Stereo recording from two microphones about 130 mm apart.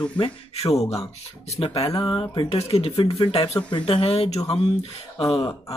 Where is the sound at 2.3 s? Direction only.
45° left (ahead or behind).